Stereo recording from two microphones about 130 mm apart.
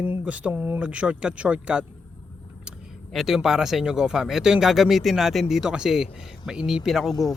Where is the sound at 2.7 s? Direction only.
5° right (ahead or behind).